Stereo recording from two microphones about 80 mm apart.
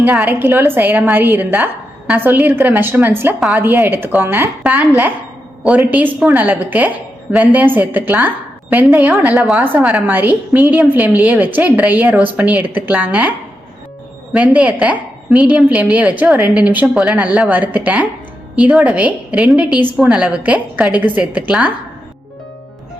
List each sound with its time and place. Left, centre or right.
0.0 s a woman's voice: centre
0.3 s a woman's voice: right
9.3 s a woman's voice: centre
9.6 s a woman's voice: right
14.3 s a woman's voice: centre
17.2 s a woman's voice: centre